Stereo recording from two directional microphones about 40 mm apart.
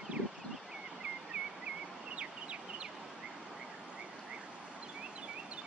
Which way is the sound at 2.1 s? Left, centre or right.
Right.